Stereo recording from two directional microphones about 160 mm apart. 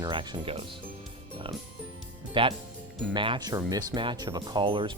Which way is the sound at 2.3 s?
30° right (ahead or behind).